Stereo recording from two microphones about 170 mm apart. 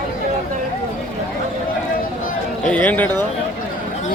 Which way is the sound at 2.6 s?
5° left (ahead or behind).